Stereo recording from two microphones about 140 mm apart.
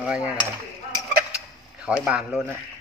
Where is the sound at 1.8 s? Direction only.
5° right (ahead or behind).